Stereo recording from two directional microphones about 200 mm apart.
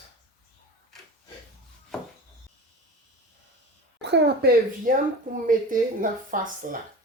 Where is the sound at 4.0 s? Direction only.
60° right (ahead or behind).